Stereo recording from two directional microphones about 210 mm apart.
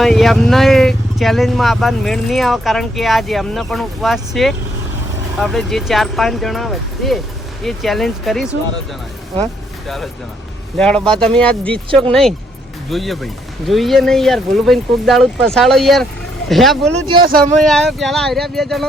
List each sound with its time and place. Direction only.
0.0 s speech: centre (ahead or behind)
12.9 s speech: centre (ahead or behind)
16.9 s speech: 20° right (ahead or behind)
17.2 s speech: 40° right (ahead or behind)
17.6 s speech: centre (ahead or behind)